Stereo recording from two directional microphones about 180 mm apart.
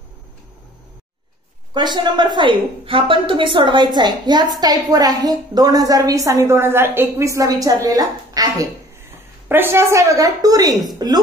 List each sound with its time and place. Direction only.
1.7 s a woman's voice: 25° right (ahead or behind)